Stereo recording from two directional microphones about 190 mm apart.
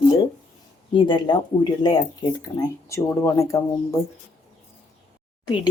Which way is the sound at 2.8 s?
15° left (ahead or behind).